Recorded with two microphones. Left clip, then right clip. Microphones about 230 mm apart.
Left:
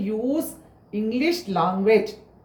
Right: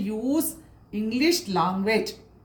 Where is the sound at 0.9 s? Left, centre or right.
Right.